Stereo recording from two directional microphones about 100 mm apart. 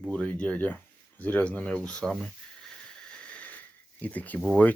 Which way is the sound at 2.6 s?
5° left (ahead or behind).